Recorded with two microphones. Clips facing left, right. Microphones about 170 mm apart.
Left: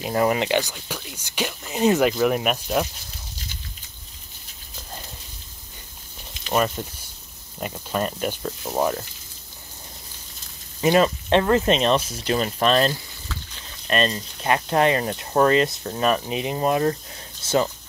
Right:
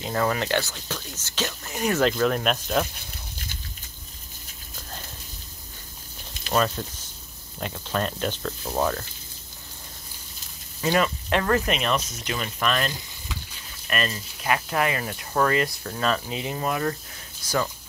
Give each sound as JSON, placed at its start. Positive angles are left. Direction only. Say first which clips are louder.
{"t": 0.0, "sound": "speech", "louder": "left 4 dB", "side_deg": 20}
{"t": 6.5, "sound": "speech", "louder": "left 1 dB", "side_deg": 10}
{"t": 10.8, "sound": "speech", "louder": "left 5 dB", "side_deg": 25}